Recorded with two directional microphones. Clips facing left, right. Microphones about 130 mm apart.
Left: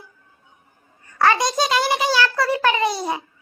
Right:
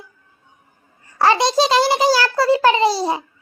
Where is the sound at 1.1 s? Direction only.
30° right (ahead or behind).